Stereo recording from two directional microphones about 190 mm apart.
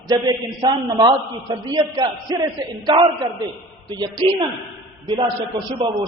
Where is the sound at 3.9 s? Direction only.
20° right (ahead or behind).